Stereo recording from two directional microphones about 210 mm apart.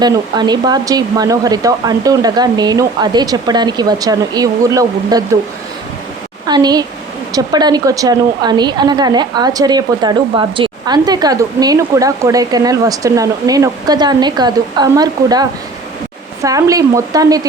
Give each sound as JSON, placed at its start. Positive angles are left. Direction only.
{"t": 0.0, "sound": "a woman's voice", "side_deg": -20}
{"t": 6.5, "sound": "a woman's voice", "side_deg": -20}